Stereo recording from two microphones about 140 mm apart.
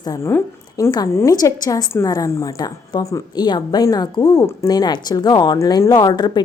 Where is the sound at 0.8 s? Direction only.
30° left (ahead or behind).